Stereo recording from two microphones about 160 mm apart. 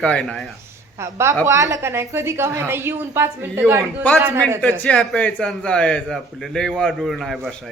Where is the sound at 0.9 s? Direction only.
15° right (ahead or behind).